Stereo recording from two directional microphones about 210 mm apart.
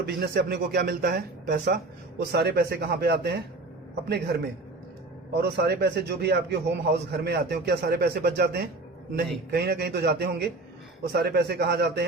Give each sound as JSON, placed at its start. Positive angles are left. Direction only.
{"t": 0.0, "sound": "speech", "side_deg": -50}
{"t": 5.4, "sound": "speech", "side_deg": -50}